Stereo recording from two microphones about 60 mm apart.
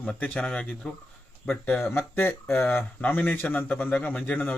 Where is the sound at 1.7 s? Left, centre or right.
Left.